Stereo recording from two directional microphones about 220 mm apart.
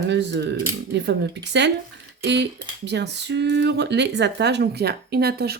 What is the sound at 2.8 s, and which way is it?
Speech, 50° right (ahead or behind).